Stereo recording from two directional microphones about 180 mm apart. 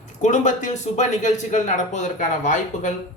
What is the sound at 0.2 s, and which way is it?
A man's voice, 45° left (ahead or behind).